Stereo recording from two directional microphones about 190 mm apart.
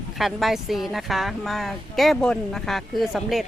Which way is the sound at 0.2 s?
Centre (ahead or behind).